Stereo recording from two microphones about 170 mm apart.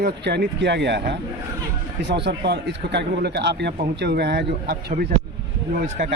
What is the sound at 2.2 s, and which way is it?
A man's voice, 85° right.